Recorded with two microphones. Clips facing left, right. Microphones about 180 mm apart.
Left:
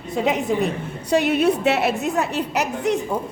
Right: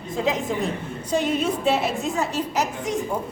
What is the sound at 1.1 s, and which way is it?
A woman's voice, 70° left (ahead or behind).